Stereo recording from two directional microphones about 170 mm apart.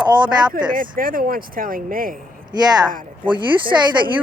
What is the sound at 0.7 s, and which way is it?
Speech, 55° right (ahead or behind).